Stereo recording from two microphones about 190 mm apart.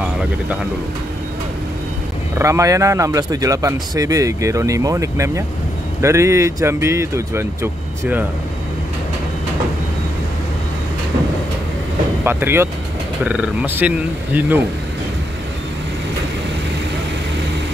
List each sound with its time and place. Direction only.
2.3 s a man's voice: 15° right (ahead or behind)
12.3 s a man's voice: 10° right (ahead or behind)